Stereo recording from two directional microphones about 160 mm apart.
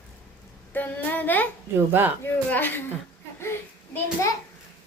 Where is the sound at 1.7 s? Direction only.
15° right (ahead or behind).